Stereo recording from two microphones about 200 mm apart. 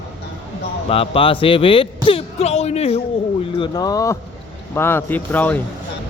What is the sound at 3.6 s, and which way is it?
Speech, 20° left (ahead or behind).